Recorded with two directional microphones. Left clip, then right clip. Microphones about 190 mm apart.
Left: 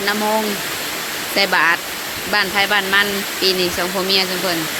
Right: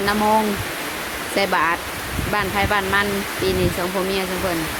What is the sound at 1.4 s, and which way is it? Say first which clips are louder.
Speech: left 4 dB; 5° right (ahead or behind).